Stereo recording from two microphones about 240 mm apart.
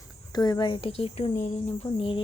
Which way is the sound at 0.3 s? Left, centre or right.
Centre.